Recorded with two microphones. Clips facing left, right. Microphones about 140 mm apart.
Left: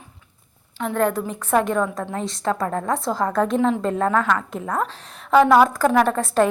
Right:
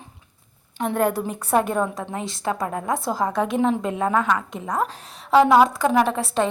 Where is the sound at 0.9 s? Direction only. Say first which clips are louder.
Left 1 dB; 10° right (ahead or behind).